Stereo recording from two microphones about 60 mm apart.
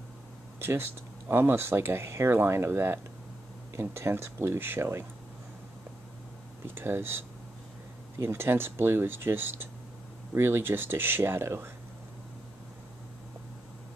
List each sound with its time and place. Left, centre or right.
0.6 s speech: right
6.6 s speech: right